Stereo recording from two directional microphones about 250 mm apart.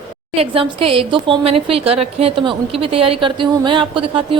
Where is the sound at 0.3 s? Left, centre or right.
Right.